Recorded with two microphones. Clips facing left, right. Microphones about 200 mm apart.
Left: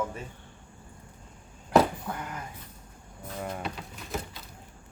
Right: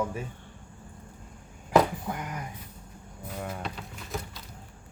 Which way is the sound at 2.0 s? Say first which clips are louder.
Right 2 dB; 15° right (ahead or behind).